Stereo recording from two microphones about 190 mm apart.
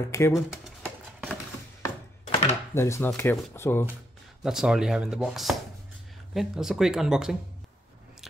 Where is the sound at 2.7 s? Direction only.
15° left (ahead or behind).